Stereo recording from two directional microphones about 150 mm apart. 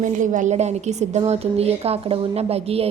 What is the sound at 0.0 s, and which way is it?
A woman's voice, 60° right (ahead or behind).